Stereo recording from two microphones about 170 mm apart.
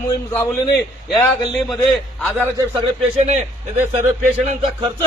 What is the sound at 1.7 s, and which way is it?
Speech, 5° left (ahead or behind).